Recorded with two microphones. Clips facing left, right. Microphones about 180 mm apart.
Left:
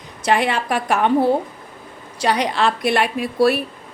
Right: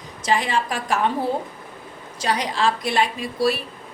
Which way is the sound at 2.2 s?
65° left (ahead or behind).